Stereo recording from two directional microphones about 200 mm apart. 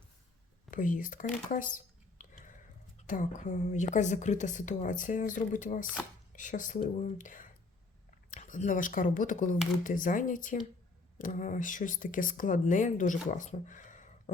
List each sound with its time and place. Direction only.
0.7 s a woman's voice: 40° left (ahead or behind)
2.2 s a sound: 40° left (ahead or behind)
3.0 s a woman's voice: 40° left (ahead or behind)